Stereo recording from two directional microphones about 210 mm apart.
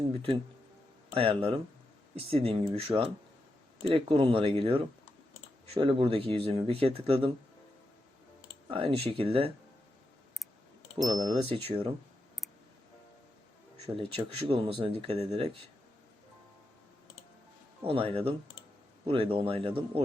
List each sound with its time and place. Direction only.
0.1 s speech: 25° right (ahead or behind)
8.7 s speech: 25° right (ahead or behind)
11.1 s speech: 20° right (ahead or behind)
13.8 s speech: 25° right (ahead or behind)
17.8 s speech: 25° right (ahead or behind)